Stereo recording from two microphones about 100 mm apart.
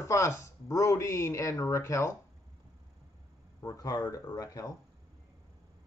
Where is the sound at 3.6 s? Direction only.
40° left (ahead or behind).